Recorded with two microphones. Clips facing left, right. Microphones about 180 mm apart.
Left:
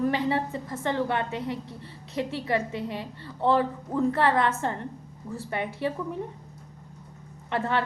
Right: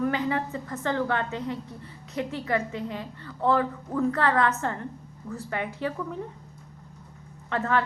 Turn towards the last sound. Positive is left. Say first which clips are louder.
# right 1 dB
turn(degrees=20)  # may be behind; listen again after turning